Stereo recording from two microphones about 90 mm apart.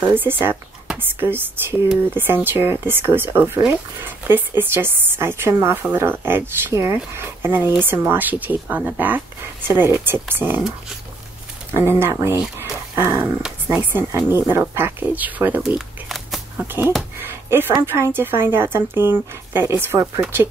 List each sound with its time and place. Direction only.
0.0 s speech: 25° right (ahead or behind)
11.7 s speech: 25° right (ahead or behind)
16.6 s speech: 25° right (ahead or behind)
17.2 s a sound: 25° right (ahead or behind)
17.8 s speech: 25° right (ahead or behind)